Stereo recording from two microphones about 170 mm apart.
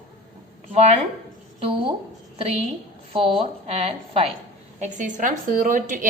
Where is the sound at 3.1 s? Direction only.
30° right (ahead or behind).